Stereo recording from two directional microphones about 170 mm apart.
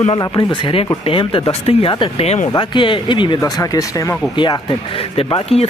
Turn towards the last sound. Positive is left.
turn(degrees=30)  # may be behind; listen again after turning